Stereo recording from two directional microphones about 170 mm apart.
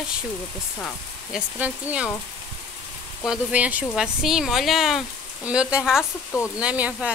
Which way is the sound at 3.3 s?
5° right (ahead or behind).